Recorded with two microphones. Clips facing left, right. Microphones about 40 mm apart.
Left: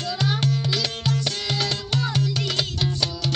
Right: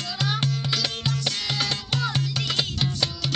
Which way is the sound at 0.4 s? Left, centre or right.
Right.